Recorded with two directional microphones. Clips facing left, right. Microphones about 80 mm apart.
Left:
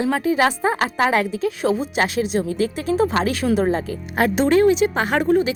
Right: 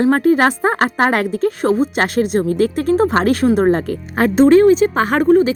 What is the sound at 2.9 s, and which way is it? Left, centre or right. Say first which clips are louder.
A woman's voice: right 4 dB; right.